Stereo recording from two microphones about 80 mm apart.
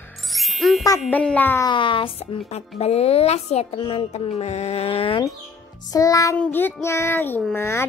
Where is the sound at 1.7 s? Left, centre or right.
Left.